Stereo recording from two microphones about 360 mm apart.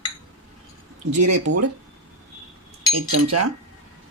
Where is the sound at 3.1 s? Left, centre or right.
Right.